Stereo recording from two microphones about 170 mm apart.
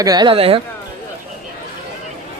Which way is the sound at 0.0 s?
25° right (ahead or behind).